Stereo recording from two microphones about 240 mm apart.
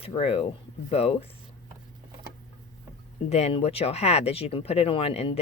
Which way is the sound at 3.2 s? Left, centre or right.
Left.